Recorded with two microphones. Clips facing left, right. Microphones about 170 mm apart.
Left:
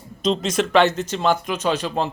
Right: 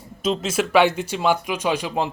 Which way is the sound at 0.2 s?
5° right (ahead or behind).